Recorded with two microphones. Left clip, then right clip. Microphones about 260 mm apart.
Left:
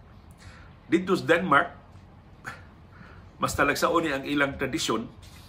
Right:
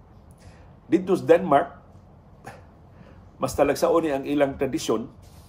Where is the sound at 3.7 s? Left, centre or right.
Left.